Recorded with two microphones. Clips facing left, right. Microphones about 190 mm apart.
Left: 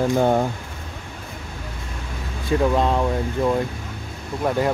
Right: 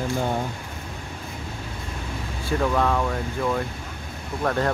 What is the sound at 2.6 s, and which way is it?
Speech, 20° left (ahead or behind).